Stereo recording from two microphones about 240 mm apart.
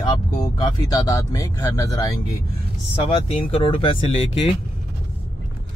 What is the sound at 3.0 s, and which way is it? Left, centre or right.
Speech, left.